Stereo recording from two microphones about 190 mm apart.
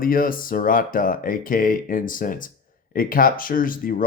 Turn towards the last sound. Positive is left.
turn(degrees=50)  # may be behind; listen again after turning